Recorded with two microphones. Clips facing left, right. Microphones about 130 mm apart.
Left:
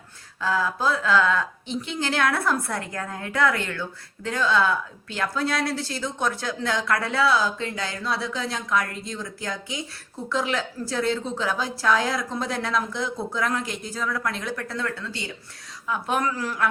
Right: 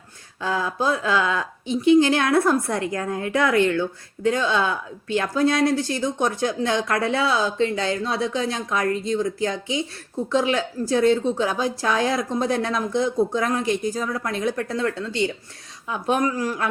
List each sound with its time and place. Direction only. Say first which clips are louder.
0.4 s a woman's voice: right 1 dB; 20° right (ahead or behind)
10.9 s a woman's voice: right 7 dB; 20° right (ahead or behind)